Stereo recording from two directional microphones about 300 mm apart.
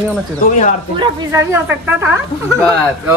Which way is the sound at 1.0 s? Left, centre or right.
Centre.